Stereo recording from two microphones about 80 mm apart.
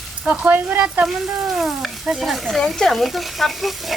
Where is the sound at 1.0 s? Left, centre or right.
Centre.